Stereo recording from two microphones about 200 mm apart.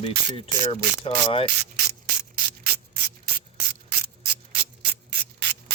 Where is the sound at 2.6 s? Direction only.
55° right (ahead or behind).